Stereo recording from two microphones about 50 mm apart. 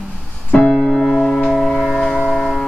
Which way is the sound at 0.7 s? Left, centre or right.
Left.